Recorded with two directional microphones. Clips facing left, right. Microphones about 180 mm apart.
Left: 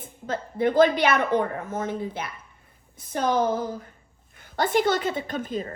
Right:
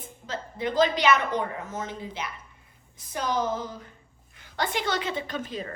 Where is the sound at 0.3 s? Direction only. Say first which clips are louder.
Left 6 dB; 55° left (ahead or behind).